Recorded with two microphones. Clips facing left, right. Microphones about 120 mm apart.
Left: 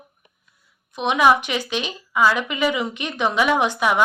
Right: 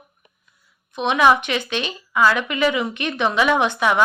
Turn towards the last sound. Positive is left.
turn(degrees=10)  # may be behind; listen again after turning